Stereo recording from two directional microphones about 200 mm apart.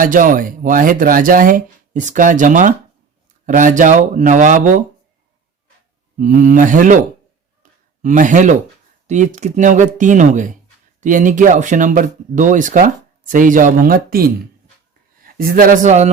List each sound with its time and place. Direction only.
0.0 s speech: 40° right (ahead or behind)
6.1 s speech: 40° right (ahead or behind)
7.6 s a sound: 40° right (ahead or behind)
9.0 s a man's voice: 35° right (ahead or behind)